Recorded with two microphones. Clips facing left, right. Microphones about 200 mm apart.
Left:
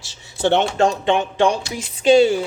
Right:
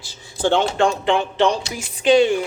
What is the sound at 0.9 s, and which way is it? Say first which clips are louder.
Speech: left 1 dB; 20° left (ahead or behind).